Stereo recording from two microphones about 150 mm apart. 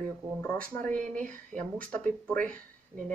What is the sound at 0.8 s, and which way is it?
Speech, 60° right (ahead or behind).